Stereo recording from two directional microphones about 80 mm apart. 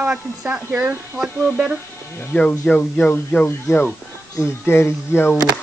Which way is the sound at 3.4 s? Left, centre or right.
Left.